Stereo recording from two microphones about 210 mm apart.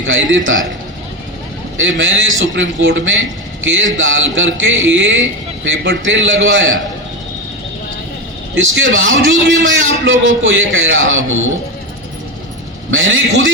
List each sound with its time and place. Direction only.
0.0 s a man's voice: 65° right (ahead or behind)
1.8 s a man's voice: 65° right (ahead or behind)
8.5 s a man's voice: 65° right (ahead or behind)
12.9 s a man's voice: 65° right (ahead or behind)